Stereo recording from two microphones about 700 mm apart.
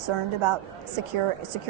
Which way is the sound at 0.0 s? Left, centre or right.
Right.